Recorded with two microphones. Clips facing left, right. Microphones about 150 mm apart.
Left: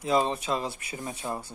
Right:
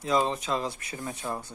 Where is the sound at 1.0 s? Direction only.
15° left (ahead or behind).